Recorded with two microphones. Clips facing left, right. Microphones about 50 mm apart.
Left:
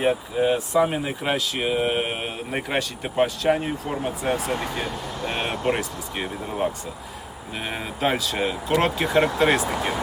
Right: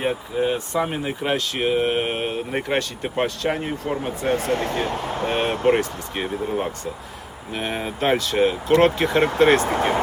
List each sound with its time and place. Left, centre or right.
0.0 s speech: centre
4.9 s speech: right
5.6 s speech: centre
9.7 s speech: right